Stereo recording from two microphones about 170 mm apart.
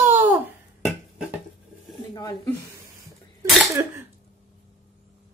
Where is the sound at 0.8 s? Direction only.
Centre (ahead or behind).